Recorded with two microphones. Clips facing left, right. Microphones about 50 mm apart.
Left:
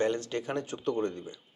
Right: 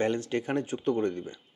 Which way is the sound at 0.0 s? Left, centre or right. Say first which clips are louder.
Right 1 dB; right.